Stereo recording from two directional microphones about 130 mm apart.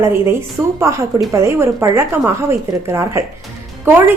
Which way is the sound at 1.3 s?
20° right (ahead or behind).